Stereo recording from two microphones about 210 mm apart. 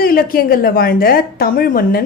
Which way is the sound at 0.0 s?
45° left (ahead or behind).